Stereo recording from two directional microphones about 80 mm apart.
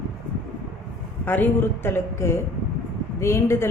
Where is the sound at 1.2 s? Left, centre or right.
Left.